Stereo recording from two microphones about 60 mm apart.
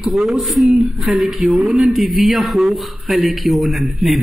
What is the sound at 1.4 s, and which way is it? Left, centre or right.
Speech, right.